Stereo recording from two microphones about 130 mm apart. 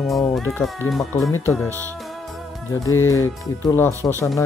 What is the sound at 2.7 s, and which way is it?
Speech, 25° left (ahead or behind).